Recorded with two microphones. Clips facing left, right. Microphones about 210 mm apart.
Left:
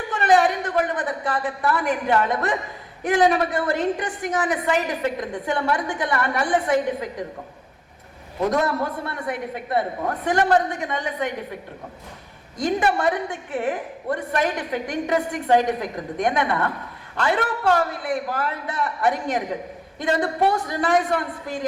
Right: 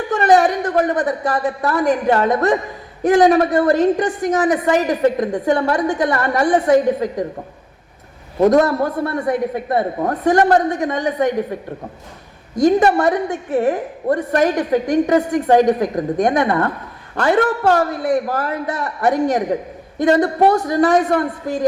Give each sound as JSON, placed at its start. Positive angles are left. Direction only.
{"t": 0.1, "sound": "a woman's voice", "side_deg": -45}
{"t": 8.4, "sound": "a woman's voice", "side_deg": -45}
{"t": 12.5, "sound": "a woman's voice", "side_deg": -40}